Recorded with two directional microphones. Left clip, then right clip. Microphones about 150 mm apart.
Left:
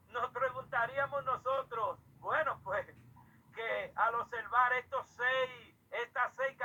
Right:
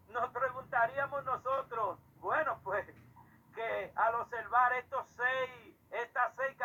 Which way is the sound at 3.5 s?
20° left (ahead or behind).